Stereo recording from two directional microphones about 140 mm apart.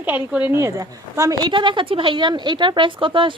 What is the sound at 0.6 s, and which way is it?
A woman's voice, 20° right (ahead or behind).